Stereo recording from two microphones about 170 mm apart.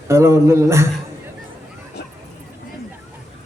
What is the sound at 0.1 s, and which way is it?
Speech, 15° right (ahead or behind).